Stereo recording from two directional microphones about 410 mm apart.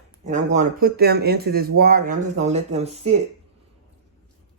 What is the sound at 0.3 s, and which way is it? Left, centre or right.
Speech, centre.